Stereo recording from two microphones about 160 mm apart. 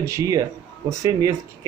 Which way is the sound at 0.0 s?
20° right (ahead or behind).